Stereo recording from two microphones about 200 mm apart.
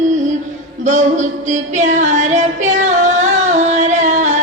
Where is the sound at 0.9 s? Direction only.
35° right (ahead or behind).